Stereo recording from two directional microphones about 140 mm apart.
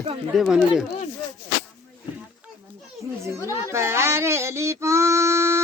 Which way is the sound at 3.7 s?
20° right (ahead or behind).